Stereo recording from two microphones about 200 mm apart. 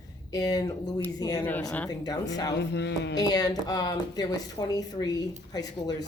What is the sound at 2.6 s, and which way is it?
Music, 60° left (ahead or behind).